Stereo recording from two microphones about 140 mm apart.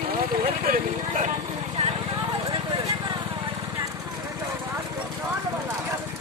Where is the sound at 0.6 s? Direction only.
80° right.